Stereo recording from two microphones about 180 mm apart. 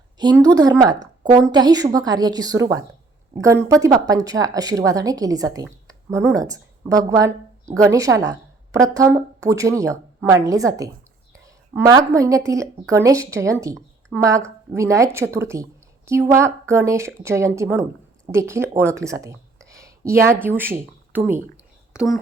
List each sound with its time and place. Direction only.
0.2 s speech: 20° right (ahead or behind)
0.9 s a woman's voice: 45° right (ahead or behind)
1.4 s speech: 25° right (ahead or behind)
13.7 s a sound: 5° left (ahead or behind)
14.3 s speech: 15° right (ahead or behind)
18.8 s a sound: 15° right (ahead or behind)
20.4 s speech: 10° right (ahead or behind)
21.9 s speech: centre (ahead or behind)